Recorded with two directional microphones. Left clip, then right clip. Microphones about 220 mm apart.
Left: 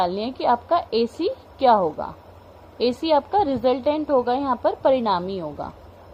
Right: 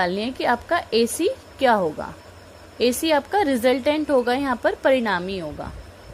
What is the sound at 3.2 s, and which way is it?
A woman's voice, 40° right (ahead or behind).